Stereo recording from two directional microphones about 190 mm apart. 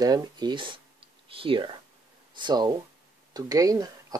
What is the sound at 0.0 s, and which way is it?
Speech, 20° right (ahead or behind).